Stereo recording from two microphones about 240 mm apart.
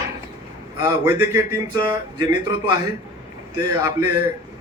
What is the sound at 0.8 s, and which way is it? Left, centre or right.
A man's voice, centre.